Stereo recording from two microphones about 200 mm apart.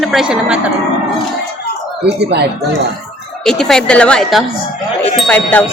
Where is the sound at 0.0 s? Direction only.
Centre (ahead or behind).